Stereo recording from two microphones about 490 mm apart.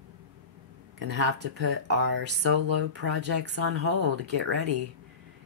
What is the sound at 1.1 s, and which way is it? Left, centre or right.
Speech, right.